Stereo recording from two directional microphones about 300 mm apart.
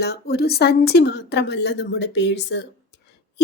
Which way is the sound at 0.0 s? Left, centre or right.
Left.